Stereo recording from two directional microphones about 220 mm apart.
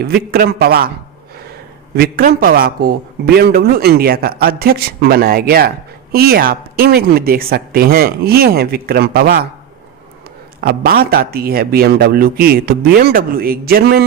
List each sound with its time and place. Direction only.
0.0 s a man's voice: 45° right (ahead or behind)
2.0 s a man's voice: 40° right (ahead or behind)
10.6 s a man's voice: 45° right (ahead or behind)